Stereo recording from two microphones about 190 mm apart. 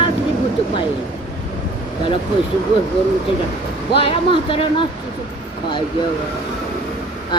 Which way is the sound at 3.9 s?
30° left (ahead or behind).